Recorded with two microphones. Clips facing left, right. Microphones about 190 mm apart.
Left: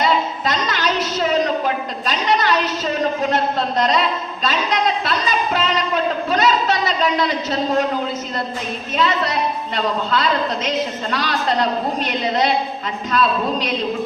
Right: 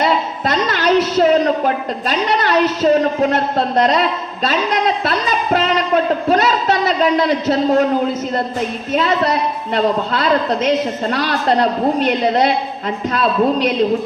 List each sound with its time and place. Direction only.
0.0 s a sound: 55° right (ahead or behind)
4.4 s a man's voice: 50° right (ahead or behind)
8.9 s a woman's voice: 55° right (ahead or behind)